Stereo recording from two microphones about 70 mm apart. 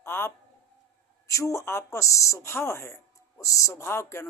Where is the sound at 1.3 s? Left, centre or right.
Left.